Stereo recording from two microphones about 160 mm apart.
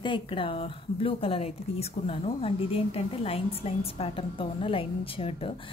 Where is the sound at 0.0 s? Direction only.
30° left (ahead or behind).